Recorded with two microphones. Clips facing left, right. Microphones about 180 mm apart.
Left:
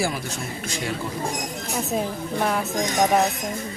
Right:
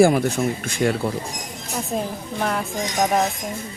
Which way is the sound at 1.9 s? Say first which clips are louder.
Even; 5° left (ahead or behind).